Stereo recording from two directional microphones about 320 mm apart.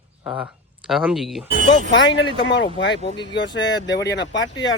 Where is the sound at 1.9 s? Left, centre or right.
Left.